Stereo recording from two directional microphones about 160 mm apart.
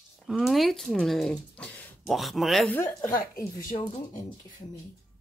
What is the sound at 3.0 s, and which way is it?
Speech, 60° left (ahead or behind).